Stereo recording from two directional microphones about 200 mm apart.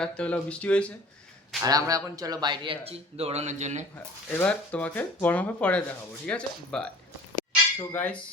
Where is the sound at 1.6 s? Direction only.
15° right (ahead or behind); by 3.8 s 35° right (ahead or behind).